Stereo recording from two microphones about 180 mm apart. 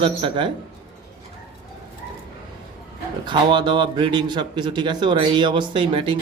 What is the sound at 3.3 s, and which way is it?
Speech, 25° right (ahead or behind).